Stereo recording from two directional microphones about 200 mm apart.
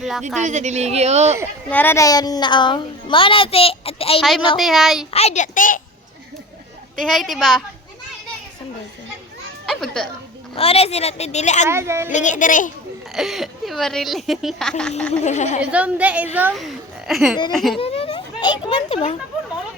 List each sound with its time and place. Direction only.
0.0 s a woman's voice: centre (ahead or behind)
0.4 s speech: 35° right (ahead or behind)
1.7 s a woman's voice: 10° left (ahead or behind); by 4.2 s 30° left (ahead or behind)
4.5 s speech: centre (ahead or behind)
5.1 s a woman's voice: 35° left (ahead or behind)
6.9 s speech: centre (ahead or behind)
9.6 s speech: centre (ahead or behind)
10.5 s a woman's voice: 30° left (ahead or behind)
11.7 s a woman's voice: 15° right (ahead or behind)
12.1 s a woman's voice: 40° left (ahead or behind)
13.1 s speech: centre (ahead or behind)
15.2 s a woman's voice: 35° left (ahead or behind)
15.7 s a woman's voice: 5° right (ahead or behind)
17.7 s a sound: 30° left (ahead or behind)